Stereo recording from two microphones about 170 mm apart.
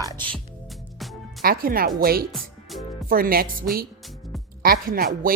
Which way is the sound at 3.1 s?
60° right (ahead or behind).